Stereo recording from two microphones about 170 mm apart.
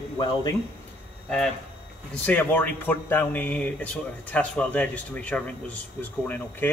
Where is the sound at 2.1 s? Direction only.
10° left (ahead or behind).